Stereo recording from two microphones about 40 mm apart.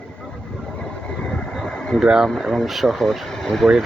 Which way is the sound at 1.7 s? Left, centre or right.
Centre.